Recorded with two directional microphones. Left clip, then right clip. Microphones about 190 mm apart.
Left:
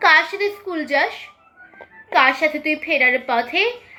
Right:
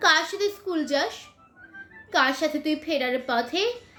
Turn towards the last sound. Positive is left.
turn(degrees=-20)  # may be behind; listen again after turning